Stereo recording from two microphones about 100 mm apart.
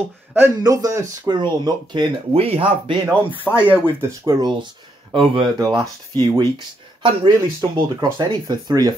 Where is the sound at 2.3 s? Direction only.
75° right (ahead or behind).